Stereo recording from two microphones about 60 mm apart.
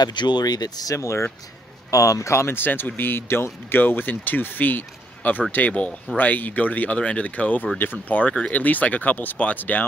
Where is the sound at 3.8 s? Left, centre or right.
Left.